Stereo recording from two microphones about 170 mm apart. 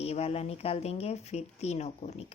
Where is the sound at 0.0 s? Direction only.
35° left (ahead or behind).